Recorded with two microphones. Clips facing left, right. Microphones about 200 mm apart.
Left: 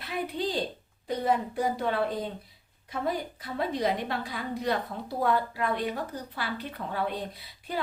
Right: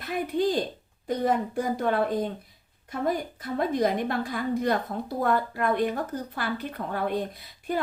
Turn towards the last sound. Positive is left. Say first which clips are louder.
# right 6 dB
turn(degrees=-50)  # may be behind; listen again after turning